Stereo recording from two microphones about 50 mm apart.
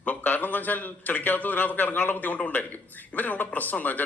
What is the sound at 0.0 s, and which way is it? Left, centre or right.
Speech, left.